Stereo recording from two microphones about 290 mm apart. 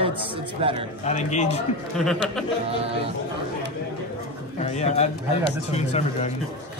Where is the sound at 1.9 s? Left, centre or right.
Centre.